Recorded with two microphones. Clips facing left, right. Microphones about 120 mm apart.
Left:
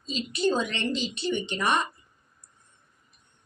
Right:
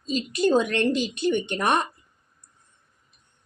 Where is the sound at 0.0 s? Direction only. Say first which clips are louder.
Right 3 dB; 45° right (ahead or behind).